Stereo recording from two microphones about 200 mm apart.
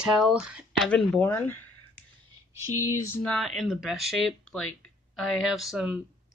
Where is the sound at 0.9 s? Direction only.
5° left (ahead or behind).